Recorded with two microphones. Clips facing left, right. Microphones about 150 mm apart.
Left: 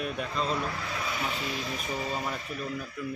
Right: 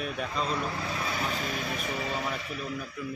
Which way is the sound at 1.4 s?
50° right (ahead or behind).